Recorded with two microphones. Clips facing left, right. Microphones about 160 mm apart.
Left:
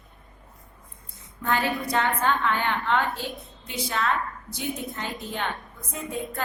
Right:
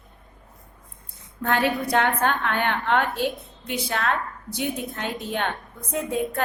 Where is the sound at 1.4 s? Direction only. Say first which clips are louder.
Right 3 dB; 70° right (ahead or behind).